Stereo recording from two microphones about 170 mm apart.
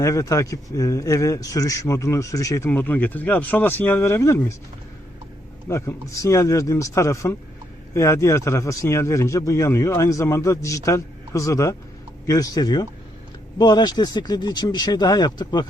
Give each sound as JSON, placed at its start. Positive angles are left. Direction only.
{"t": 0.0, "sound": "a man's voice", "side_deg": 20}
{"t": 5.6, "sound": "a man's voice", "side_deg": 15}